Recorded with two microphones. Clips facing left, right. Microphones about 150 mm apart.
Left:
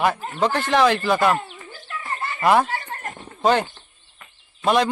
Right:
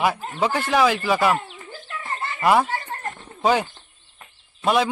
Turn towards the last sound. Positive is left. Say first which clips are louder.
# left 1 dB
turn(degrees=-5)  # may be behind; listen again after turning